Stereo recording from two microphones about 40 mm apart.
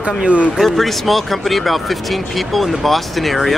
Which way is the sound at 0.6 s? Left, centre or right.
Centre.